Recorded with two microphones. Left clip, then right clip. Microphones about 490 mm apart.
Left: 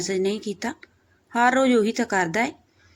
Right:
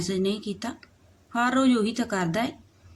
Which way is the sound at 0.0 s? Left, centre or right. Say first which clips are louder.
Left 3 dB; right.